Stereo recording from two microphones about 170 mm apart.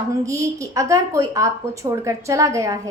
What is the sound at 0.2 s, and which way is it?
A woman's voice, 20° right (ahead or behind).